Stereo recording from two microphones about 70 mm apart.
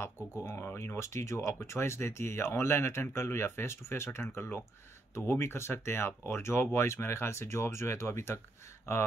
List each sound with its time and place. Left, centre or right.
0.0 s speech: left